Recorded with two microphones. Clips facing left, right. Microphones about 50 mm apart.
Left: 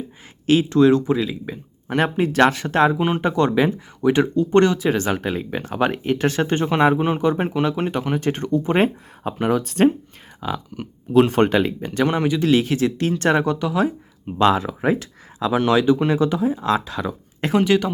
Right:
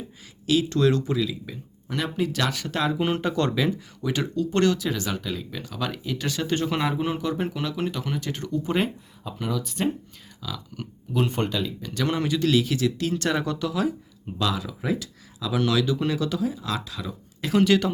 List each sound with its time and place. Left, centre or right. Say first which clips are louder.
0.4 s speech: left 5 dB; left
0.7 s speech: left 7 dB; centre
1.3 s speech: left 5 dB; left
3.0 s speech: left 5 dB; left
3.5 s speech: left 6 dB; left
10.4 s speech: left 9 dB; left
11.1 s speech: left 10 dB; left
11.9 s speech: left 6 dB; left
14.3 s speech: left 10 dB; left
17.5 s a woman's voice: left 2 dB; centre